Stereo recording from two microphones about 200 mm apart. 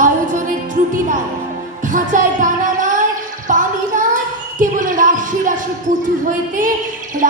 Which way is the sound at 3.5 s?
40° right (ahead or behind).